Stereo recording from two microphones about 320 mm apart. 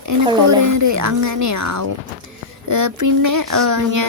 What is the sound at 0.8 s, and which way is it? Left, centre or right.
A woman's voice, right.